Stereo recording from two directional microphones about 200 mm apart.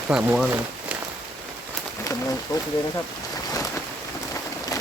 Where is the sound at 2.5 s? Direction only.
15° left (ahead or behind).